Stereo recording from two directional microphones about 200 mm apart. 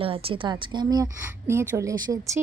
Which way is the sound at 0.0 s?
25° right (ahead or behind).